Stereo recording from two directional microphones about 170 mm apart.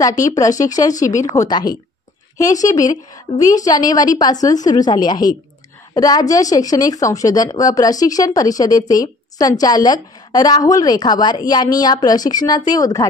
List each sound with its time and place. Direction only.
0.0 s speech: 20° left (ahead or behind)
2.9 s speech: 20° left (ahead or behind)